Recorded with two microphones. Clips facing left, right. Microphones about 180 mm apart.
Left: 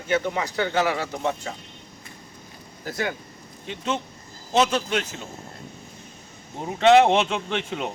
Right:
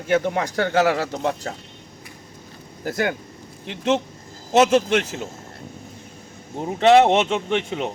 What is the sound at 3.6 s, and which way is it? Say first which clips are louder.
Speech: right 7 dB; 70° right (ahead or behind).